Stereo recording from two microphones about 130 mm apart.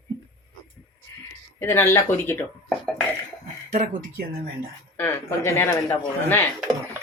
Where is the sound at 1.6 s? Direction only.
20° left (ahead or behind).